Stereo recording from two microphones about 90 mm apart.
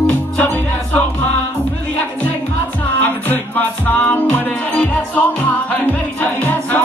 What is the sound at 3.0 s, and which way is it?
Music, 20° left (ahead or behind).